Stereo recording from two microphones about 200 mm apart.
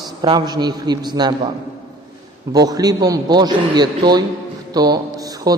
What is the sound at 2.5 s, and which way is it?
A man's voice, 20° right (ahead or behind).